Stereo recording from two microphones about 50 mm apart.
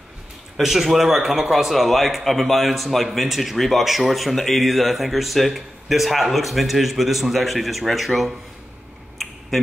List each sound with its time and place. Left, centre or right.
0.6 s speech: centre